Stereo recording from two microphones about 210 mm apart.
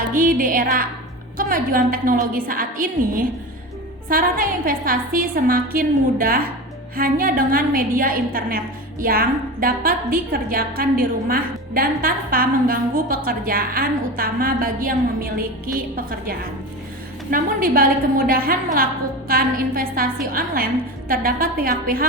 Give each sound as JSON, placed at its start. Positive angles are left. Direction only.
{"t": 0.1, "sound": "a woman's voice", "side_deg": -40}
{"t": 17.3, "sound": "a woman's voice", "side_deg": -40}